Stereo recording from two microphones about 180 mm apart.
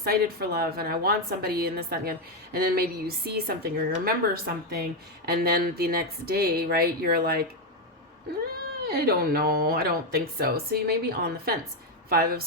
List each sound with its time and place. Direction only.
0.0 s a woman's voice: 60° right (ahead or behind)
8.8 s a woman's voice: 60° right (ahead or behind)